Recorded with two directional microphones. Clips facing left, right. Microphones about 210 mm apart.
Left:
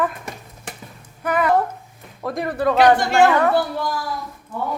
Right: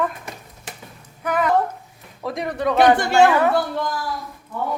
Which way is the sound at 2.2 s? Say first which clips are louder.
Left 2 dB; centre (ahead or behind).